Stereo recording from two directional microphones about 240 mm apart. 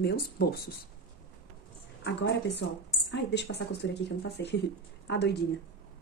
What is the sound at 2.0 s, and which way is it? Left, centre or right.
A woman's voice, left.